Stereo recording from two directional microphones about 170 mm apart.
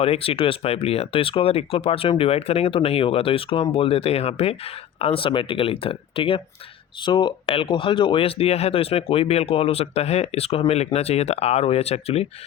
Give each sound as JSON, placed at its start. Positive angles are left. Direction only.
{"t": 0.0, "sound": "speech", "side_deg": 35}